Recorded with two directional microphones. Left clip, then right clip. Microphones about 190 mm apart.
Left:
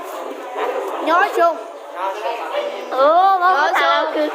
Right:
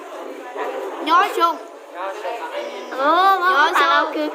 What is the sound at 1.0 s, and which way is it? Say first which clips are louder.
Speech: left 1 dB; 55° right (ahead or behind).